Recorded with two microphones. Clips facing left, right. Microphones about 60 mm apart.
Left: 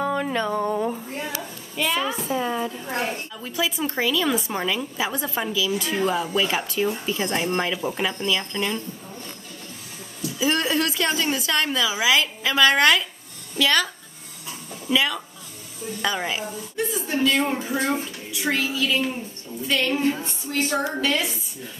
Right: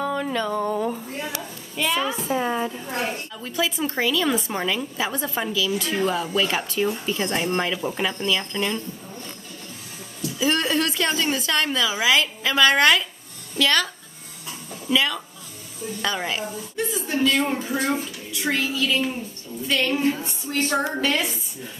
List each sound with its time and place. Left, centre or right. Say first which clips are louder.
0.0 s a sound: left 1 dB; left
0.7 s a sound: even; centre
1.8 s a woman's voice: even; centre
2.2 s a woman's voice: right 1 dB; right
3.4 s a woman's voice: right 1 dB; centre
10.4 s a woman's voice: even; centre
14.9 s a woman's voice: even; centre
20.7 s a woman's voice: right 1 dB; right